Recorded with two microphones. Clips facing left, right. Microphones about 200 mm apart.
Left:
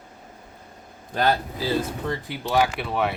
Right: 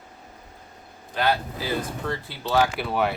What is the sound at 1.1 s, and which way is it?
Speech, 45° left (ahead or behind).